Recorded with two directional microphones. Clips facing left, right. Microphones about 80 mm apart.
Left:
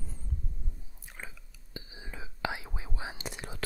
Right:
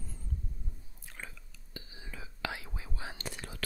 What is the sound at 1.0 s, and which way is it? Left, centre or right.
Whispering, centre.